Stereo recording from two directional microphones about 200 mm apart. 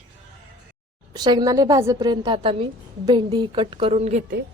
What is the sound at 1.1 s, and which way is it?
A woman's voice, 20° right (ahead or behind).